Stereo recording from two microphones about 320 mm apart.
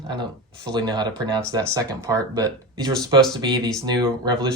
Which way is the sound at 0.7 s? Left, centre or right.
Centre.